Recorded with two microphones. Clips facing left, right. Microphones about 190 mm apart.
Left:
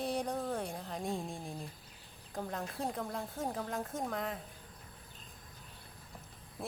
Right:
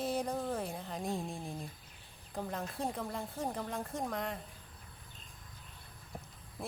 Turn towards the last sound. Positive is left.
turn(degrees=0)  # may be behind; listen again after turning